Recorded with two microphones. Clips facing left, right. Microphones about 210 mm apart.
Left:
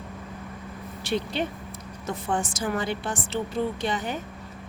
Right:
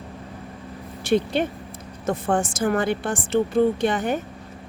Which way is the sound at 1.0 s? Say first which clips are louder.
Right 7 dB; 50° right (ahead or behind).